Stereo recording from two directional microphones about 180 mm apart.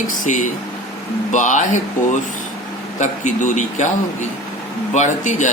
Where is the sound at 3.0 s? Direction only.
45° left (ahead or behind).